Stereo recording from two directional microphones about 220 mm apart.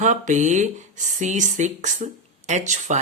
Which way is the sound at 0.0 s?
35° right (ahead or behind).